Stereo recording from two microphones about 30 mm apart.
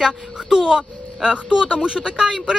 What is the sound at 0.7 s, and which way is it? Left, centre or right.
Speech, right.